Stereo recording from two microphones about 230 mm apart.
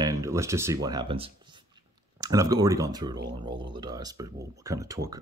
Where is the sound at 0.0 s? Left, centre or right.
Centre.